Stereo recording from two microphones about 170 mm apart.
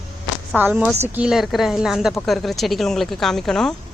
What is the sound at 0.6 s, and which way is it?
Speech, 10° right (ahead or behind).